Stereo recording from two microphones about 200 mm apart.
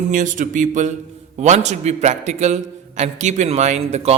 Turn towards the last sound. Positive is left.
turn(degrees=-30)  # may be behind; listen again after turning